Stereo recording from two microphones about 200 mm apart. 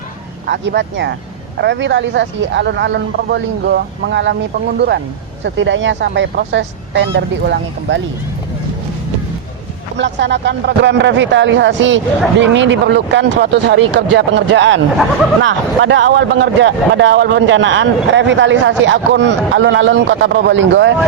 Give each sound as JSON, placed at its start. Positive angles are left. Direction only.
{"t": 0.4, "sound": "speech", "side_deg": -55}
{"t": 5.5, "sound": "speech", "side_deg": -65}
{"t": 10.0, "sound": "speech", "side_deg": -60}